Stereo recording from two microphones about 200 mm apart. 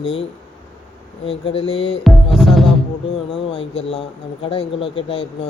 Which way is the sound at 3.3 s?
30° left (ahead or behind).